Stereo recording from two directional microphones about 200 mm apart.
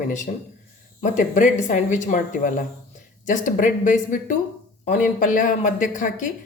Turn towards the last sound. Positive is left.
turn(degrees=40)  # may be behind; listen again after turning